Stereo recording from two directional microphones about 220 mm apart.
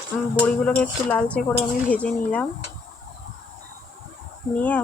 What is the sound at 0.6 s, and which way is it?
Speech, 5° left (ahead or behind).